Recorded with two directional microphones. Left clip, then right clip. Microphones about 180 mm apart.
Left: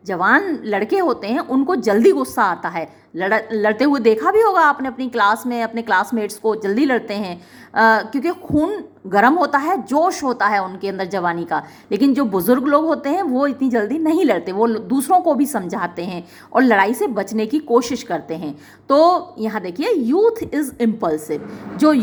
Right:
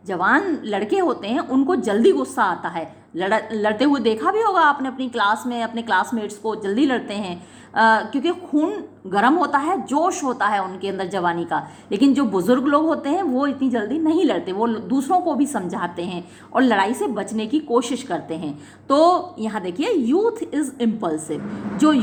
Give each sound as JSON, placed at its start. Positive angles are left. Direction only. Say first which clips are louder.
{"t": 0.1, "sound": "a woman's voice", "louder": "left 3 dB", "side_deg": 20}
{"t": 15.4, "sound": "a woman's voice", "louder": "left 2 dB", "side_deg": 25}